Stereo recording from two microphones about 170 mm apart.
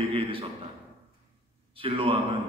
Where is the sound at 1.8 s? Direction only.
30° right (ahead or behind).